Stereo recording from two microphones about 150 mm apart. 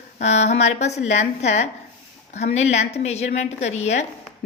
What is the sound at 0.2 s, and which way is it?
A woman's voice, 50° left (ahead or behind).